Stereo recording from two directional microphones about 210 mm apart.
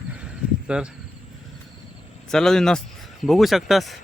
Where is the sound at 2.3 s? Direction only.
Centre (ahead or behind).